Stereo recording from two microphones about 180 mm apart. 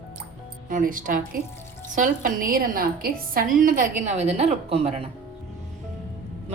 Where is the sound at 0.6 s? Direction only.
50° right (ahead or behind).